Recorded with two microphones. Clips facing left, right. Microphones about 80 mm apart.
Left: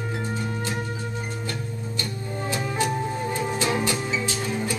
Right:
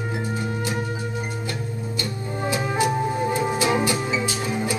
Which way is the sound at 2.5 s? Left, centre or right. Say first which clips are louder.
Right 4 dB; centre.